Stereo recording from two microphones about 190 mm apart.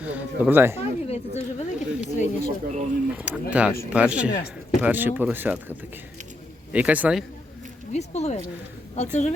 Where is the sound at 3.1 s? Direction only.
10° right (ahead or behind).